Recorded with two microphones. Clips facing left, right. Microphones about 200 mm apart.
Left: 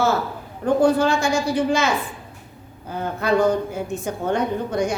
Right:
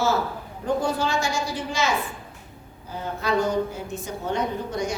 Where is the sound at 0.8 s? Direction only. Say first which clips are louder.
Left 7 dB; 55° left (ahead or behind).